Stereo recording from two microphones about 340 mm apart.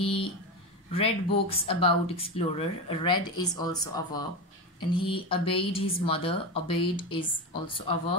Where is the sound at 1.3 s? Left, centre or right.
Centre.